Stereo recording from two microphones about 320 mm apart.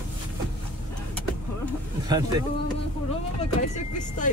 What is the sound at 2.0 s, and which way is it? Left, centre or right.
Speech, centre.